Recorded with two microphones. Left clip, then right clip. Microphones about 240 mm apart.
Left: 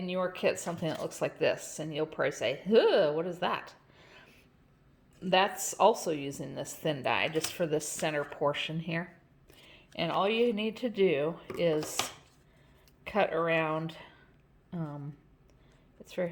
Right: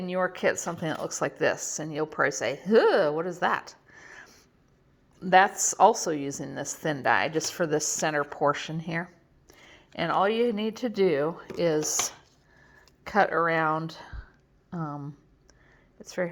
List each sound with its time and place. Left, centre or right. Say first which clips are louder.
0.0 s speech: right 4 dB; right
9.6 s a sound: right 3 dB; right
10.5 s speech: right 3 dB; right
11.8 s chopping: right 5 dB; centre
13.1 s speech: right 5 dB; right